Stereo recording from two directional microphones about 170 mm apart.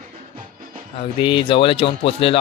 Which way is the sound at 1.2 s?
30° left (ahead or behind).